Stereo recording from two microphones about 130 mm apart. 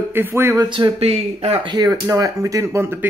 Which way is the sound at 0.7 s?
40° right (ahead or behind).